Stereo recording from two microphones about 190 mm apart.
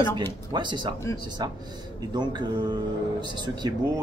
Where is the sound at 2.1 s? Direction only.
25° right (ahead or behind).